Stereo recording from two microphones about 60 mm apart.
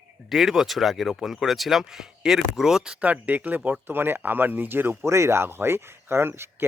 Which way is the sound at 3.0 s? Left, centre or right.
Right.